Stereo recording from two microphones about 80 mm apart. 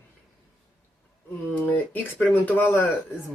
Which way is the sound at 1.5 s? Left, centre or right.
Left.